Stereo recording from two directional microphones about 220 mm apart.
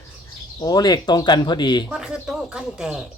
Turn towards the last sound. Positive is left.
turn(degrees=-5)  # may be behind; listen again after turning